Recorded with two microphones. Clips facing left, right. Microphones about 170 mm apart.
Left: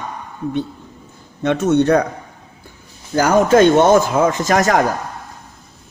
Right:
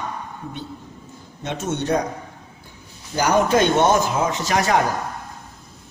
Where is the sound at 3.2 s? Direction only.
50° left (ahead or behind).